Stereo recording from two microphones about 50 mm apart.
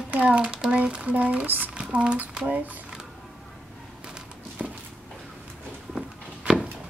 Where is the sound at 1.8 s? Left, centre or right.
Centre.